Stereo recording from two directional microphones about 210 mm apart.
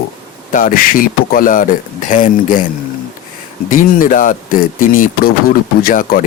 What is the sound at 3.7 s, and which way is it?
Speech, 40° left (ahead or behind).